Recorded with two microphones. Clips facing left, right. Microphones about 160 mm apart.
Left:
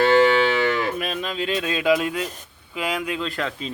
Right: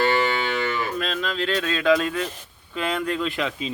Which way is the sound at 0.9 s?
15° left (ahead or behind).